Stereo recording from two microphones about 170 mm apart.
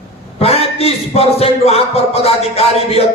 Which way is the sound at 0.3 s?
35° left (ahead or behind).